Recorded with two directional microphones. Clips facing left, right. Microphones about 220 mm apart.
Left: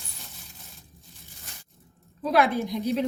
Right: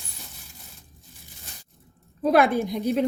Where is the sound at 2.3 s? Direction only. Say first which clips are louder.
Right 3 dB; 50° right (ahead or behind).